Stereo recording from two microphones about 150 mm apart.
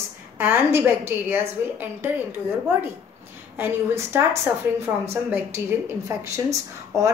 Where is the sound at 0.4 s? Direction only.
15° right (ahead or behind).